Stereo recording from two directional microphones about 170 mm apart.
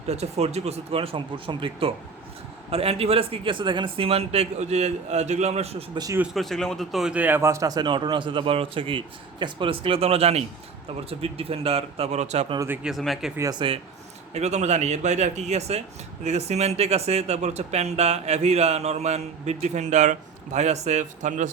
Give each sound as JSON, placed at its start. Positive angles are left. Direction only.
{"t": 0.1, "sound": "speech", "side_deg": -40}
{"t": 6.0, "sound": "a man's voice", "side_deg": -20}
{"t": 6.2, "sound": "a man's voice", "side_deg": 0}
{"t": 12.5, "sound": "speech", "side_deg": -10}
{"t": 13.3, "sound": "a man's voice", "side_deg": -20}
{"t": 14.3, "sound": "speech", "side_deg": -40}